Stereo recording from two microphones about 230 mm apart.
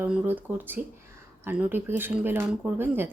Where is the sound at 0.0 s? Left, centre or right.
Centre.